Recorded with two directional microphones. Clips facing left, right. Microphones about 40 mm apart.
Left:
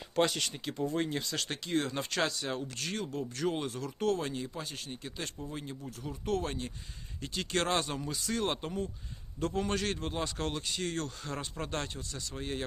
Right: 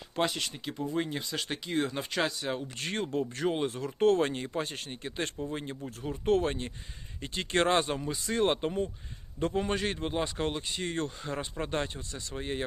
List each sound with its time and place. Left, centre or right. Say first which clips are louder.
0.2 s speech: left 1 dB; centre
2.6 s speech: right 3 dB; right
4.1 s speech: right 6 dB; right